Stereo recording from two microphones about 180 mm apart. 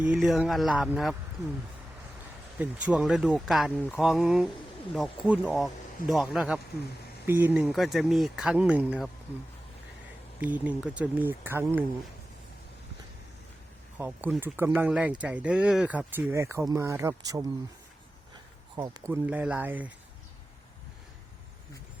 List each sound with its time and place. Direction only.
0.0 s speech: centre (ahead or behind)
2.6 s speech: 5° right (ahead or behind)
10.4 s speech: 10° right (ahead or behind)
14.0 s speech: 10° right (ahead or behind)
18.8 s speech: 20° right (ahead or behind)
19.1 s speech: 10° right (ahead or behind)